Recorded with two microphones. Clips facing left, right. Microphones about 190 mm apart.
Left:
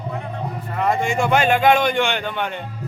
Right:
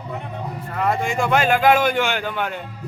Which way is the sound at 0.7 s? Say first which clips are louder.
Left 1 dB; centre (ahead or behind).